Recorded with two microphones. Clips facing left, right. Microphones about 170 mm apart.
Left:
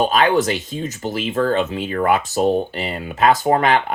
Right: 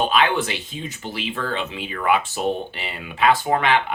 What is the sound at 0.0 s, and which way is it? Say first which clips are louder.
Speech: left 4 dB; 40° left (ahead or behind).